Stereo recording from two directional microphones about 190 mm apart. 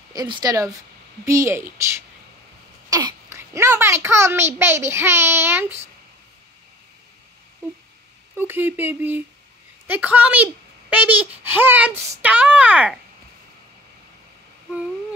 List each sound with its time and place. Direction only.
0.1 s a child's voice: 20° right (ahead or behind)
2.9 s a child's voice: 20° right (ahead or behind)
8.4 s a child's voice: 10° right (ahead or behind)